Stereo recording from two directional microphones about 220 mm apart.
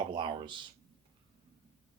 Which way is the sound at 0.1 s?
20° right (ahead or behind).